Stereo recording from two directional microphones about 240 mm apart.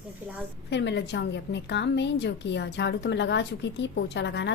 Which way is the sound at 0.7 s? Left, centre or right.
Left.